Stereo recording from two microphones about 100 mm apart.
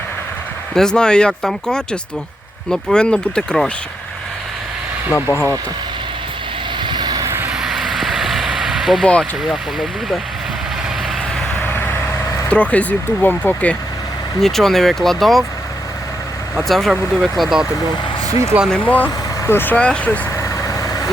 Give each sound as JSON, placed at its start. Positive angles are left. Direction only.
{"t": 0.7, "sound": "speech", "side_deg": 5}
{"t": 5.1, "sound": "speech", "side_deg": 25}
{"t": 6.7, "sound": "vehicle", "side_deg": -50}
{"t": 7.5, "sound": "vehicle", "side_deg": -5}
{"t": 9.5, "sound": "speech", "side_deg": 0}
{"t": 12.5, "sound": "speech", "side_deg": 15}
{"t": 14.4, "sound": "speech", "side_deg": 5}
{"t": 16.6, "sound": "speech", "side_deg": 0}
{"t": 18.3, "sound": "speech", "side_deg": 75}
{"t": 18.7, "sound": "speech", "side_deg": 15}
{"t": 20.3, "sound": "vehicle", "side_deg": 35}